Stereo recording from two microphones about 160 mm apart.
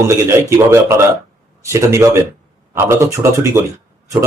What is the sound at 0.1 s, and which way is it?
A man's voice, 15° right (ahead or behind).